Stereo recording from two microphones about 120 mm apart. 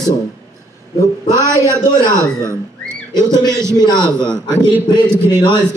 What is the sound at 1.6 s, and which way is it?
Speech, 25° left (ahead or behind).